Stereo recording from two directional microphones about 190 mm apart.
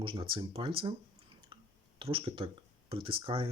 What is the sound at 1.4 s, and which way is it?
Clicking, 25° right (ahead or behind).